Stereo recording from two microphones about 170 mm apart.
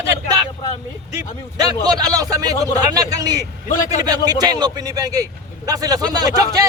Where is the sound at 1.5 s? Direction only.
20° right (ahead or behind).